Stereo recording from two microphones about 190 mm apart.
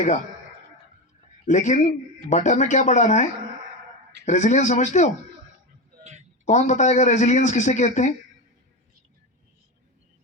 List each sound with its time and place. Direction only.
1.5 s a man's voice: 40° left (ahead or behind)
4.3 s a man's voice: 40° left (ahead or behind)
6.0 s a sound: 40° right (ahead or behind)
6.4 s a man's voice: 40° left (ahead or behind)